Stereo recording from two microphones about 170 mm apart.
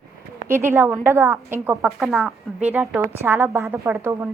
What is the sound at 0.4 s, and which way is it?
Speech, 15° right (ahead or behind).